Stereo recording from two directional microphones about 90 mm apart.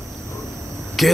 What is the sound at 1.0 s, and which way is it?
Dog, centre (ahead or behind).